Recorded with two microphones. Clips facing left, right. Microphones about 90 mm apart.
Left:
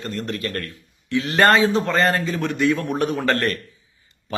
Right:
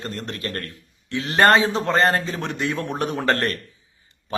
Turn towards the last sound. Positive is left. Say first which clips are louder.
# left 1 dB
turn(degrees=-30)  # may be behind; listen again after turning